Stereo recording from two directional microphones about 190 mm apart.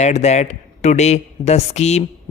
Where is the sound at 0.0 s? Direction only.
35° left (ahead or behind).